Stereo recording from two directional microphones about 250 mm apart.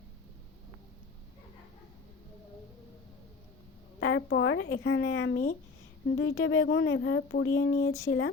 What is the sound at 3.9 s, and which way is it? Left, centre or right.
Speech, left.